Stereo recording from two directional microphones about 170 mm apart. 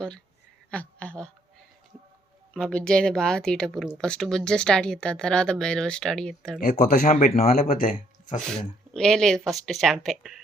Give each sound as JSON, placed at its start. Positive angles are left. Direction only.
{"t": 0.7, "sound": "speech", "side_deg": 5}
{"t": 2.5, "sound": "speech", "side_deg": 5}
{"t": 7.0, "sound": "speech", "side_deg": 50}
{"t": 7.5, "sound": "speech", "side_deg": 60}
{"t": 8.4, "sound": "speech", "side_deg": 5}